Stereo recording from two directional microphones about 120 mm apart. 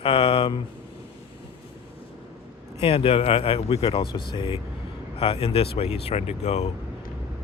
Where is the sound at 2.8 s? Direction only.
50° left (ahead or behind).